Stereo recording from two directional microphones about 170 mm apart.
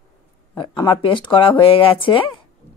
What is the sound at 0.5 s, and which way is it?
Speech, 25° left (ahead or behind).